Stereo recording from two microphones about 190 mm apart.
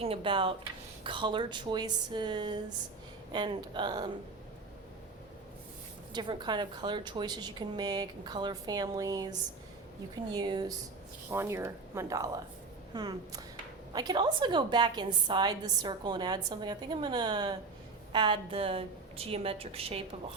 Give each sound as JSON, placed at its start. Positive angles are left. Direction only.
{"t": 0.0, "sound": "a woman's voice", "side_deg": -30}
{"t": 6.1, "sound": "a woman's voice", "side_deg": -25}